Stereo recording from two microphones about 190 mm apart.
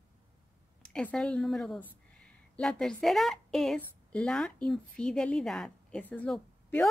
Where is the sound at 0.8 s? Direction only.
5° left (ahead or behind).